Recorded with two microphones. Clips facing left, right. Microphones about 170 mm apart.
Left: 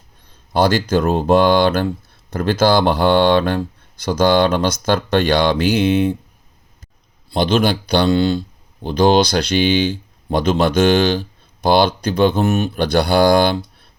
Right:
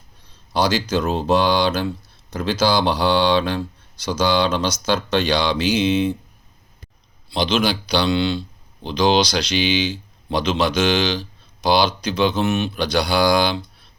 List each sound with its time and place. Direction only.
0.5 s speech: 55° left (ahead or behind)
7.3 s speech: 50° left (ahead or behind)